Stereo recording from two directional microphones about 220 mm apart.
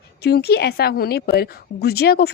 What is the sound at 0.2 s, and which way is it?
A woman's voice, 45° left (ahead or behind).